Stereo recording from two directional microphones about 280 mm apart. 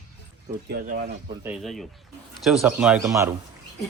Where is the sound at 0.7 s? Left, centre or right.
Right.